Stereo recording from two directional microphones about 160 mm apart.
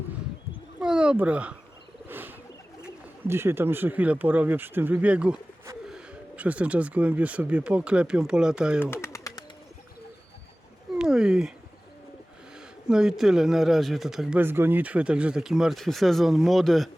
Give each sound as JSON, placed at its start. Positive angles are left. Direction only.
{"t": 0.8, "sound": "speech", "side_deg": -5}
{"t": 2.0, "sound": "bird", "side_deg": -10}
{"t": 2.8, "sound": "speech", "side_deg": -15}
{"t": 8.8, "sound": "bird", "side_deg": 15}
{"t": 10.9, "sound": "a sound", "side_deg": -5}
{"t": 12.9, "sound": "speech", "side_deg": -5}